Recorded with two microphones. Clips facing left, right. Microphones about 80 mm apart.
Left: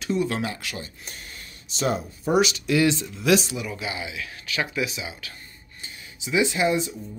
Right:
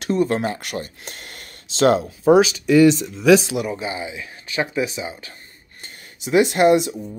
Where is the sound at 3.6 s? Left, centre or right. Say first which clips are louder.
Right 5 dB; right.